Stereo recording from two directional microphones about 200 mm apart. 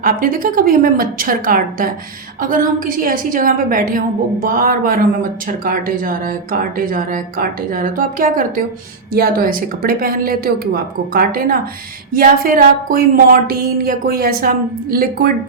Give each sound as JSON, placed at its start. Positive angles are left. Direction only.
{"t": 0.0, "sound": "a woman's voice", "side_deg": -45}